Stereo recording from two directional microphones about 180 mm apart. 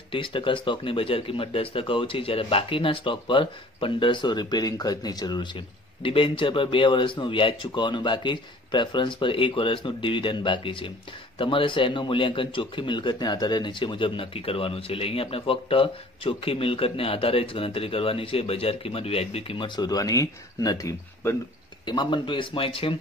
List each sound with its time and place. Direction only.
0.1 s a man's voice: 30° left (ahead or behind)